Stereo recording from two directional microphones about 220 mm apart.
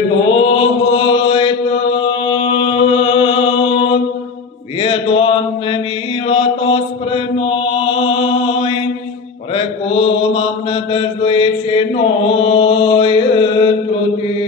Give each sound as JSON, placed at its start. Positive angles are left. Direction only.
{"t": 0.3, "sound": "mantra", "side_deg": 25}
{"t": 10.3, "sound": "mantra", "side_deg": 20}